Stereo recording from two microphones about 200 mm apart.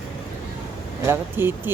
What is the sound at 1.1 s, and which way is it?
Speech, 10° right (ahead or behind).